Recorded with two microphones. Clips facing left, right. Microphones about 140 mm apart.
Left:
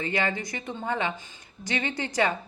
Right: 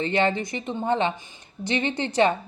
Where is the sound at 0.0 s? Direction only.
25° right (ahead or behind).